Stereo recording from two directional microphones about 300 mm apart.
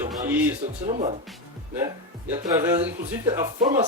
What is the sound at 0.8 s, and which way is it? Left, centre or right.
Speech, right.